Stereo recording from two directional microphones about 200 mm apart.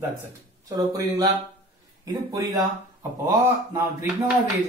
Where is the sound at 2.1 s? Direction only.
20° right (ahead or behind).